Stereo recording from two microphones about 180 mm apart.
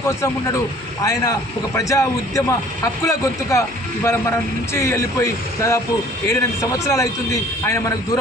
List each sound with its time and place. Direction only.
1.0 s a man's voice: 20° left (ahead or behind)